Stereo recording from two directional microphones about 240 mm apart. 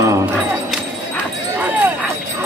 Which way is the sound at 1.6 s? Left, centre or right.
Centre.